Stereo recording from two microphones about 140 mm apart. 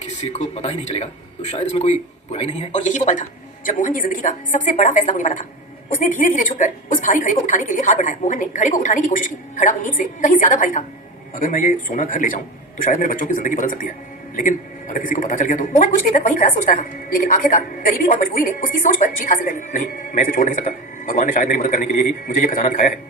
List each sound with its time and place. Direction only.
0.0 s a man's voice: 55° left (ahead or behind)